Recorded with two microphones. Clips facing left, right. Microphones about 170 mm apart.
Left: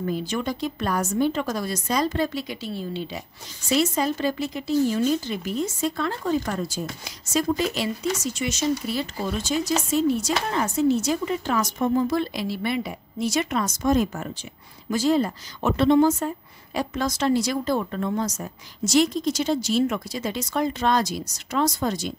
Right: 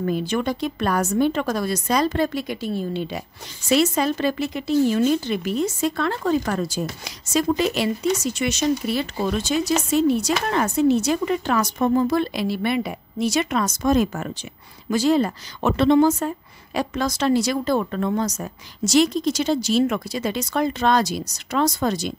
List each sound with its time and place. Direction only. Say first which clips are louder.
0.0 s a woman's voice: right 4 dB; 60° right (ahead or behind)
3.6 s speech: right 3 dB; 70° right (ahead or behind); by 14.3 s 90° right
14.9 s speech: right 2 dB; 75° right (ahead or behind)